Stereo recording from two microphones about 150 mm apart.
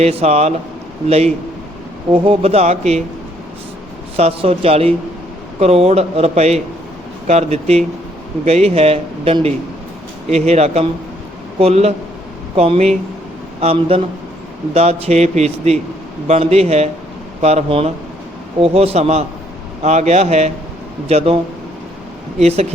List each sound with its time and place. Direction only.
0.0 s a man's voice: 45° right (ahead or behind)
4.2 s a man's voice: 40° right (ahead or behind)
22.4 s a man's voice: 45° right (ahead or behind)